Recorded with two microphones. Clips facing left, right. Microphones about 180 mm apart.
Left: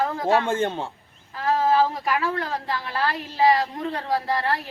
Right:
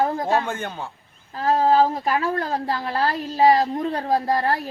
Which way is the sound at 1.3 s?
25° right (ahead or behind).